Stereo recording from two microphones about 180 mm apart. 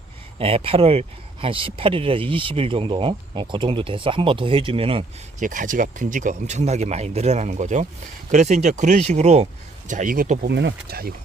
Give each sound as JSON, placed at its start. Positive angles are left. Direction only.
{"t": 0.3, "sound": "speech", "side_deg": -30}
{"t": 5.4, "sound": "speech", "side_deg": -45}
{"t": 10.4, "sound": "speech", "side_deg": -75}